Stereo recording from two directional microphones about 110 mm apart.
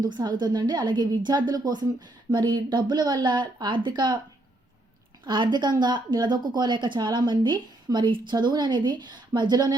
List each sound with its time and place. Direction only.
0.0 s a woman's voice: 40° right (ahead or behind)
5.2 s speech: 45° right (ahead or behind)